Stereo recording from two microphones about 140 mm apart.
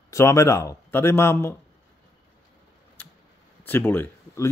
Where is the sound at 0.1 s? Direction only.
20° left (ahead or behind).